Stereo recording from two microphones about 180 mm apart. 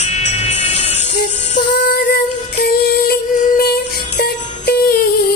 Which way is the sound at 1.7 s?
50° left (ahead or behind).